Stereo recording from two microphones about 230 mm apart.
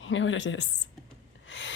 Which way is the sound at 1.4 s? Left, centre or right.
Left.